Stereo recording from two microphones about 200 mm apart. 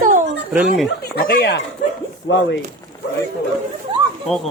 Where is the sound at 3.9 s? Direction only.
25° right (ahead or behind).